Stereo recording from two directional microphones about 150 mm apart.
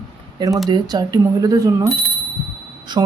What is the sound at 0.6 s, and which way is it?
Speech, 25° right (ahead or behind).